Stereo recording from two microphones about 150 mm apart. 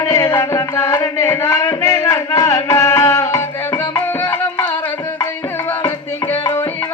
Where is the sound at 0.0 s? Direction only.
20° left (ahead or behind).